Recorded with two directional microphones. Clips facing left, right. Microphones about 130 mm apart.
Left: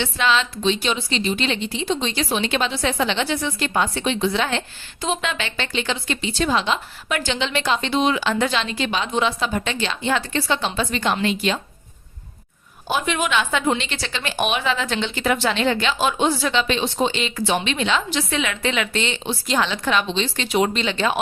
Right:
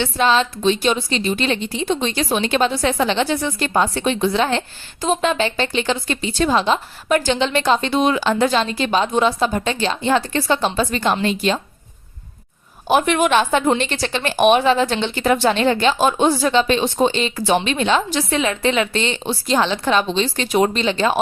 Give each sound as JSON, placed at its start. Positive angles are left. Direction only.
{"t": 0.0, "sound": "a woman's voice", "side_deg": -40}
{"t": 12.9, "sound": "a woman's voice", "side_deg": -55}